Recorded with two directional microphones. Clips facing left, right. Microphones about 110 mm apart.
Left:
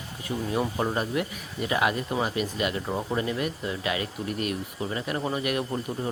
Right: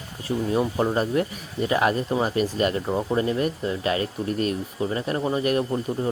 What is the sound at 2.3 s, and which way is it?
Speech, 40° right (ahead or behind).